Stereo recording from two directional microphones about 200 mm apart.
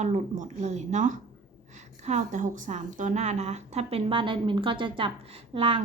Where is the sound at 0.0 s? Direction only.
35° right (ahead or behind).